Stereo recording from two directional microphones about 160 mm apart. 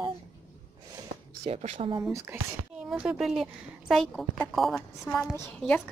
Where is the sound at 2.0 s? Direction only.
15° right (ahead or behind).